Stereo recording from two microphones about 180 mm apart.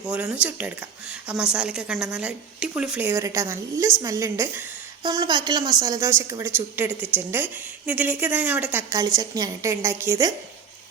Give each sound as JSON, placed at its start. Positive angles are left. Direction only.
{"t": 0.1, "sound": "a woman's voice", "side_deg": -5}